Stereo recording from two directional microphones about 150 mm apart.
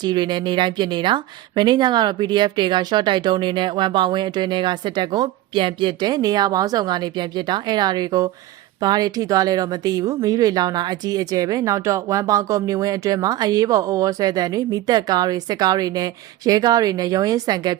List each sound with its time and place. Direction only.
0.0 s speech: 30° right (ahead or behind)